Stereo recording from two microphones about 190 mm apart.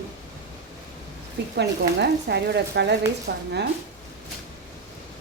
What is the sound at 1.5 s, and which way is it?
Speech, 60° right (ahead or behind).